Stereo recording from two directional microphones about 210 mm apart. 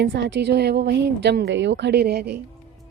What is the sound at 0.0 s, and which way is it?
A woman's voice, 50° right (ahead or behind).